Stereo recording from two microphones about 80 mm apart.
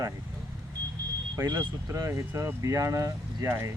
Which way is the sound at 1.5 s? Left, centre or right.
Right.